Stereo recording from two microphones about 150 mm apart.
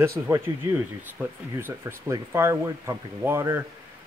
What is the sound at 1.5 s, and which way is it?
Speech, 15° right (ahead or behind).